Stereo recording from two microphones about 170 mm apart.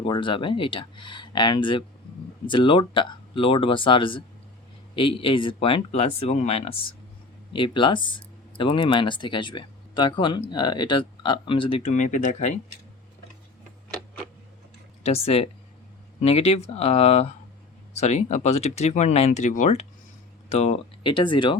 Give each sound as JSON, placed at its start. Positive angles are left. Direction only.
{"t": 0.0, "sound": "speech", "side_deg": 30}
{"t": 15.0, "sound": "speech", "side_deg": 35}